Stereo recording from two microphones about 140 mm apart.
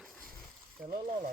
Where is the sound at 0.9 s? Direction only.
85° right.